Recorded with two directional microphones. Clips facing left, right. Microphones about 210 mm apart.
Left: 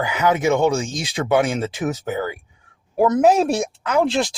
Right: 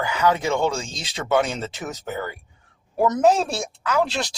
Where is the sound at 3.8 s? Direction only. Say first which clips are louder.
Left 3 dB; 25° left (ahead or behind).